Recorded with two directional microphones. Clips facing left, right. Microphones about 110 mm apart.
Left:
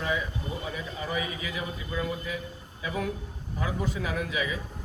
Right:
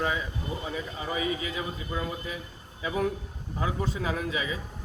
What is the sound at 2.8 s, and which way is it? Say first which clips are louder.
A man's voice: right 3 dB; 25° right (ahead or behind).